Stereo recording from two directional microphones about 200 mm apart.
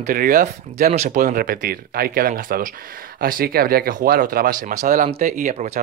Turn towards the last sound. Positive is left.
turn(degrees=-40)  # may be behind; listen again after turning